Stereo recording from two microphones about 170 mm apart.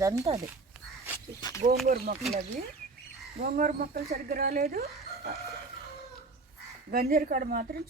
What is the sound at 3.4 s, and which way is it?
Speech, 55° right (ahead or behind).